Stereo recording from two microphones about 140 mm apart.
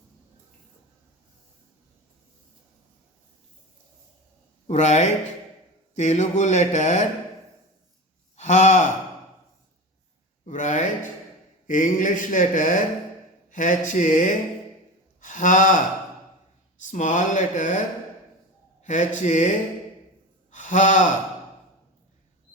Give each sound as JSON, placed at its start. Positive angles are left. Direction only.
{"t": 4.6, "sound": "speech", "side_deg": 55}
{"t": 8.4, "sound": "speech", "side_deg": 55}
{"t": 10.4, "sound": "speech", "side_deg": 60}
{"t": 11.7, "sound": "a sound", "side_deg": 70}
{"t": 15.2, "sound": "speech", "side_deg": 65}
{"t": 16.9, "sound": "speech", "side_deg": 60}
{"t": 20.5, "sound": "a man's voice", "side_deg": 60}